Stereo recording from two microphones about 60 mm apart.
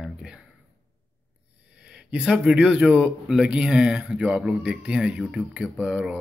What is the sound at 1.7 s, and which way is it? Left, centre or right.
Speech, centre.